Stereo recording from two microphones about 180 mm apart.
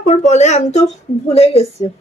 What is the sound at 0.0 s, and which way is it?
Speech, 40° left (ahead or behind).